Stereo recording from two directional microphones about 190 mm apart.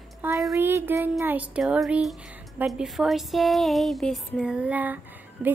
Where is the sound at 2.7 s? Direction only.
Centre (ahead or behind).